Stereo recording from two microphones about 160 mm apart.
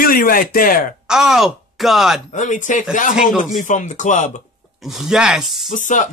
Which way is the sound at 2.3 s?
50° left (ahead or behind).